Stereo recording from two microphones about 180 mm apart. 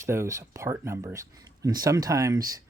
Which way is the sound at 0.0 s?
15° right (ahead or behind).